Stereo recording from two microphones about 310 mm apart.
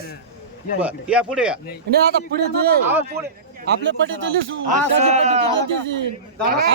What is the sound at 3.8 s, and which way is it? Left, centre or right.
Speech, right.